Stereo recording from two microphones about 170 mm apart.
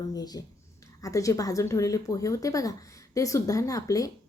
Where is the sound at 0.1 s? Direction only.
20° left (ahead or behind).